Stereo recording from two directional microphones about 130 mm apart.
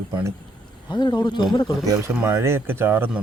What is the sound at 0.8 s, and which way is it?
Speech, 35° left (ahead or behind).